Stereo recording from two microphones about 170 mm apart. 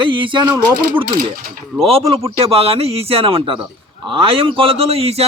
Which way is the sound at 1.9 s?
35° right (ahead or behind).